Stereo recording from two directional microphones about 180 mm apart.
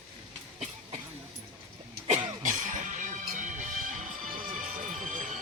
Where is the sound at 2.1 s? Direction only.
40° right (ahead or behind).